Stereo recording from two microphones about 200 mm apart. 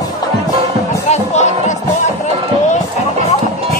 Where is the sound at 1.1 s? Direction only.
35° left (ahead or behind).